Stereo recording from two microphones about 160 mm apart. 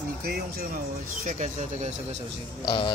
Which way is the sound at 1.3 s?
50° right (ahead or behind).